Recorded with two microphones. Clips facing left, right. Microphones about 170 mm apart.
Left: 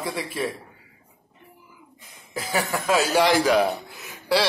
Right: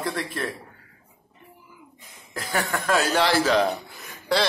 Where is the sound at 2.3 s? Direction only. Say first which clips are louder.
Left 1 dB; 5° left (ahead or behind).